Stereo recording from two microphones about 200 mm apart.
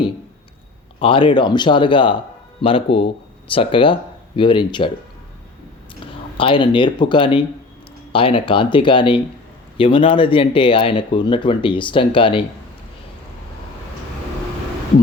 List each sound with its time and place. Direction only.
0.9 s speech: 25° left (ahead or behind)
6.0 s speech: 25° left (ahead or behind)